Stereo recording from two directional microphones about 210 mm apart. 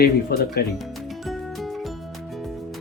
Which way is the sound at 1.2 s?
Centre (ahead or behind).